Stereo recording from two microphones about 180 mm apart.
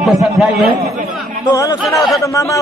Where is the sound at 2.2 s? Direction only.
15° left (ahead or behind).